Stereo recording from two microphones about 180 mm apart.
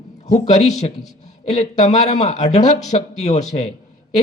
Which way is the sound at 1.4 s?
35° left (ahead or behind).